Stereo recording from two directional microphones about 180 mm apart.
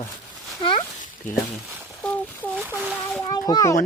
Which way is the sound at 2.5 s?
10° right (ahead or behind).